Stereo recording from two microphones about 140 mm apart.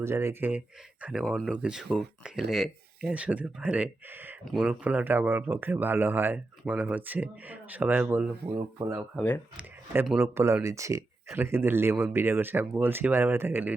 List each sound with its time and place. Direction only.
0.0 s a man's voice: 20° right (ahead or behind)
1.2 s a man's voice: 5° left (ahead or behind); by 8.5 s 15° right (ahead or behind)
8.5 s a man's voice: 25° right (ahead or behind)